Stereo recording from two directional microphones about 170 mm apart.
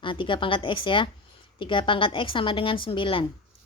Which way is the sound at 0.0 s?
30° left (ahead or behind).